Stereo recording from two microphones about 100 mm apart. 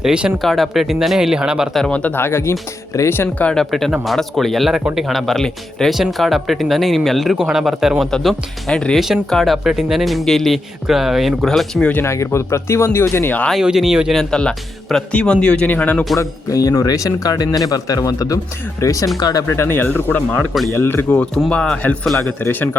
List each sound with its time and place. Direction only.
0.0 s speech: 5° right (ahead or behind)
1.8 s speech: 15° left (ahead or behind)
3.5 s speech: 5° left (ahead or behind)
11.9 s speech: 30° left (ahead or behind)
13.5 s speech: 5° right (ahead or behind)
14.2 s speech: 10° left (ahead or behind)
16.1 s speech: 35° left (ahead or behind); by 20.2 s 15° left (ahead or behind)
20.5 s speech: centre (ahead or behind)
20.7 s speech: 20° left (ahead or behind)
21.2 s speech: 10° left (ahead or behind)
22.3 s speech: 20° left (ahead or behind)